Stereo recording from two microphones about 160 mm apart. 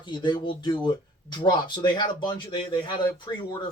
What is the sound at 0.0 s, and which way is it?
Speech, 30° left (ahead or behind).